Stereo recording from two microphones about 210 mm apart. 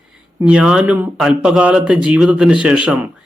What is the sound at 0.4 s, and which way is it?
Speech, 5° right (ahead or behind).